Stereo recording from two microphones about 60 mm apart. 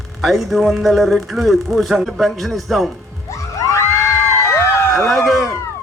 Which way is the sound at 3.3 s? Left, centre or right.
Left.